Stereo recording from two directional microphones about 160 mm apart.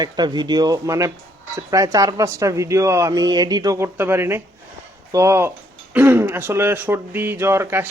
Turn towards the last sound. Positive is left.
turn(degrees=-15)  # may be behind; listen again after turning